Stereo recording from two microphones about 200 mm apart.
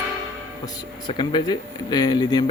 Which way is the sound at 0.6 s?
20° left (ahead or behind).